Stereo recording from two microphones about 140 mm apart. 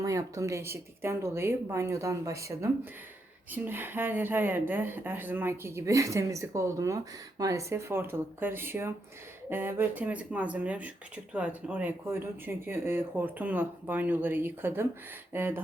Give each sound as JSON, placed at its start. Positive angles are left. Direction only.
{"t": 0.0, "sound": "speech", "side_deg": -20}